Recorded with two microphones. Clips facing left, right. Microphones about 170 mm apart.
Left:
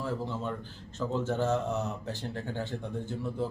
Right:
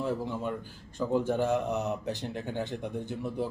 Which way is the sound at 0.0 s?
15° right (ahead or behind).